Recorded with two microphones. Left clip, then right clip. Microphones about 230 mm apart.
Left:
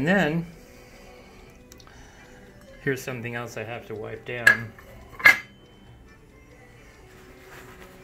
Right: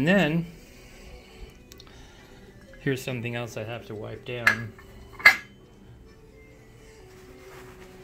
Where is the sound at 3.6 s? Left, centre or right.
Right.